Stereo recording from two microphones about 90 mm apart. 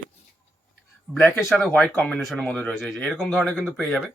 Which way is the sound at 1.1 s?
25° left (ahead or behind).